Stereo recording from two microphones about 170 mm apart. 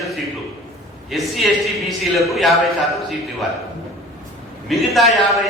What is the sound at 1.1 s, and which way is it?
A man's voice, centre (ahead or behind).